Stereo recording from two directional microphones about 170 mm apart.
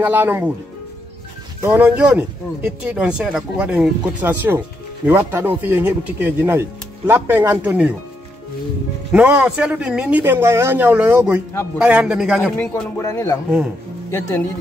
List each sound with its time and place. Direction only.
0.0 s speech: 10° right (ahead or behind)
1.6 s speech: 10° right (ahead or behind)
9.1 s a man's voice: 5° right (ahead or behind)
12.5 s speech: 15° left (ahead or behind)